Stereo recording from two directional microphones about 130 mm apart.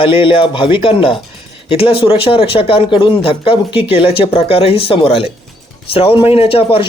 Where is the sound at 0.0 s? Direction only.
45° left (ahead or behind).